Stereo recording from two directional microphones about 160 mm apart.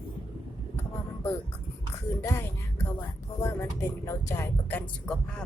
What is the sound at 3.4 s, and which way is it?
Speech, 15° left (ahead or behind).